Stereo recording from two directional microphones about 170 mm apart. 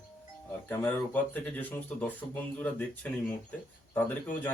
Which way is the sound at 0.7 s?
10° left (ahead or behind).